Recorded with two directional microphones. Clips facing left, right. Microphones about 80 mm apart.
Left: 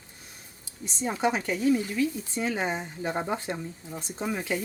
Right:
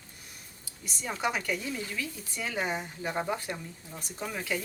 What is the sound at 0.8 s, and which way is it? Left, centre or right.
Speech, left.